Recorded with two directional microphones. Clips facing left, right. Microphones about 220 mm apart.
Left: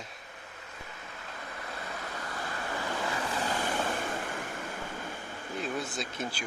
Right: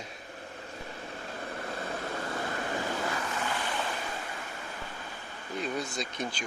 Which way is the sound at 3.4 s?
45° left (ahead or behind).